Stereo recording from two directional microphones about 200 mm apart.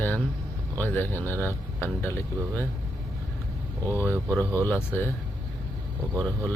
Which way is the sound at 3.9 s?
10° left (ahead or behind).